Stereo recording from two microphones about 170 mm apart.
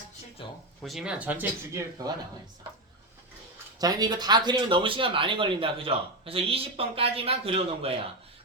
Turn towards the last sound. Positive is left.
turn(degrees=-35)  # may be behind; listen again after turning